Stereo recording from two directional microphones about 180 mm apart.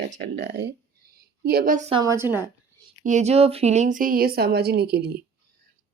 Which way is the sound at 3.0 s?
40° right (ahead or behind).